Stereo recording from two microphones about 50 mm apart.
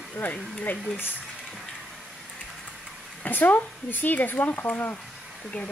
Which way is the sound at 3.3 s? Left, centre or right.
Left.